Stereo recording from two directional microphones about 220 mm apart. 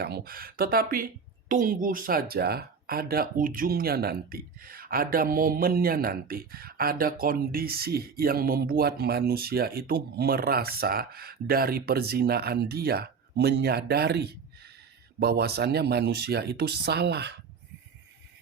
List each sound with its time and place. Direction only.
0.0 s speech: 45° right (ahead or behind)